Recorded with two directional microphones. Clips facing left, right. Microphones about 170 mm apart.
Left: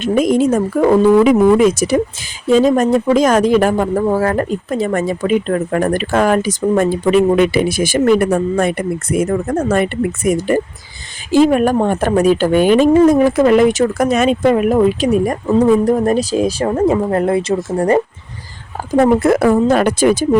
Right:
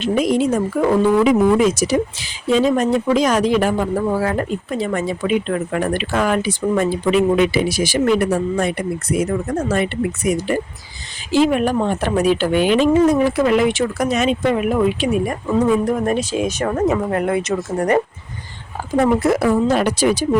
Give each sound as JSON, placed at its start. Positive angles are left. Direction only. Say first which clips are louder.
{"t": 0.0, "sound": "speech", "louder": "left 4 dB", "side_deg": 45}
{"t": 2.5, "sound": "speech", "louder": "left 4 dB", "side_deg": 45}
{"t": 18.9, "sound": "speech", "louder": "left 4 dB", "side_deg": 40}